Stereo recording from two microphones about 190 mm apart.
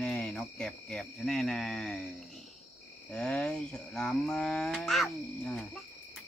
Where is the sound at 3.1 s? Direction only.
5° left (ahead or behind).